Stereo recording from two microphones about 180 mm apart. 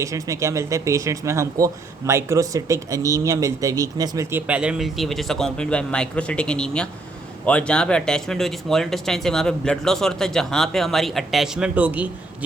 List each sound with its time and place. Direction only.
0.0 s speech: 15° right (ahead or behind)